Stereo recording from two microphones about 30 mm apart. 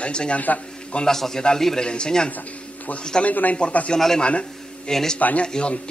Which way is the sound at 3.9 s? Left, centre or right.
Centre.